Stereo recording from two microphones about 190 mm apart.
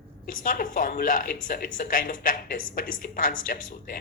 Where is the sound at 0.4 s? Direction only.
45° left (ahead or behind).